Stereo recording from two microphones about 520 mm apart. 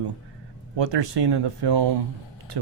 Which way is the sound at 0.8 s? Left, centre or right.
Right.